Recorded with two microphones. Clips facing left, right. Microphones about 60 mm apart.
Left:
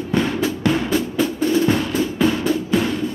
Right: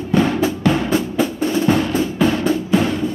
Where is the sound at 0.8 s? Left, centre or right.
Right.